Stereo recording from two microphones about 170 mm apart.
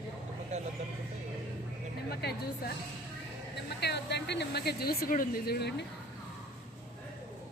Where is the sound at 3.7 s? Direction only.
80° left.